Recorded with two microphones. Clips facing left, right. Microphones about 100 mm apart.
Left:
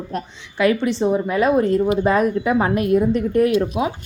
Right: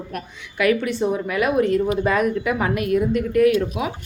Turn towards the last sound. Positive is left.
turn(degrees=30)  # may be behind; listen again after turning